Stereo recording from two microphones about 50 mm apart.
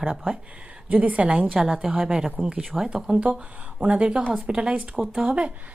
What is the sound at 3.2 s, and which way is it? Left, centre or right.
A woman's voice, right.